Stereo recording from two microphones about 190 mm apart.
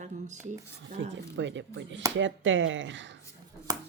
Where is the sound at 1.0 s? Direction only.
75° right (ahead or behind).